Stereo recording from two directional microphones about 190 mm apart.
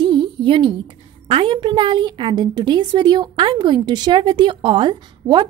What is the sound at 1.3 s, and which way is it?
A woman's voice, 25° right (ahead or behind).